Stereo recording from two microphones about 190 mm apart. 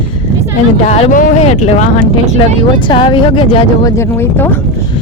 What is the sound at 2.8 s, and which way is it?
Speech, 25° left (ahead or behind).